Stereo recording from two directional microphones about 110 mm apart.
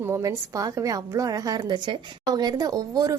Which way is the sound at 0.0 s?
30° right (ahead or behind).